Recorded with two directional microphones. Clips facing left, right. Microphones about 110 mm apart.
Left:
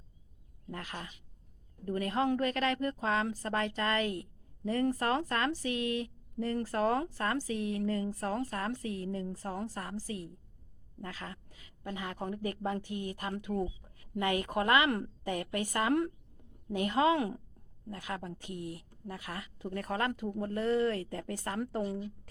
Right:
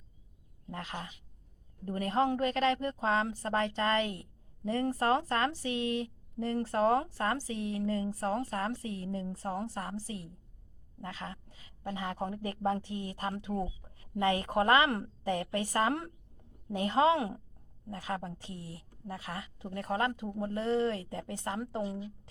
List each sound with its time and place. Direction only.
0.7 s a woman's voice: 25° right (ahead or behind)